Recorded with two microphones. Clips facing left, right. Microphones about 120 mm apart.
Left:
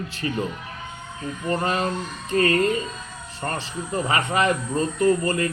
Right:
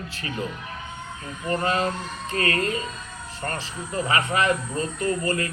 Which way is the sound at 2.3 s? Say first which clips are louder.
Left 5 dB; 30° left (ahead or behind).